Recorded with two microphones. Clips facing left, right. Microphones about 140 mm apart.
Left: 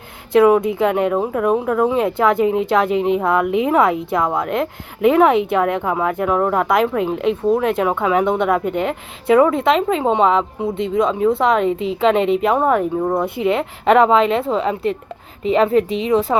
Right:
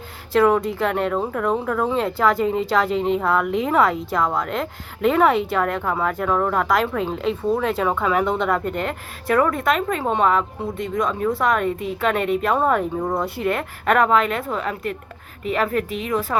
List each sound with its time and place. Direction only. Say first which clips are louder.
0.3 s speech: left 5 dB; 10° left (ahead or behind)
13.1 s speech: left 5 dB; 20° left (ahead or behind)